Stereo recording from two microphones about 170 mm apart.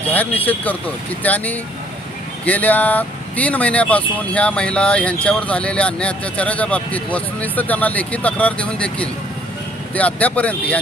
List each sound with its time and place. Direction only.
0.1 s speech: 10° left (ahead or behind)